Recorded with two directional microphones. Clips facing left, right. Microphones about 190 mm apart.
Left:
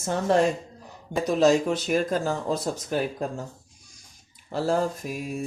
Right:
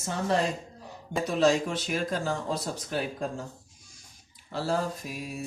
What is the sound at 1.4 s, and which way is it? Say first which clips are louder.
Speech: left 4 dB; 45° left (ahead or behind).